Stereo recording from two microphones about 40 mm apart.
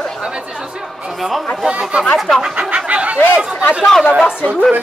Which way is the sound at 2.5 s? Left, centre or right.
Right.